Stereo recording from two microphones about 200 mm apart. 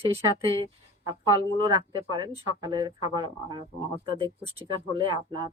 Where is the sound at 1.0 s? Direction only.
20° right (ahead or behind).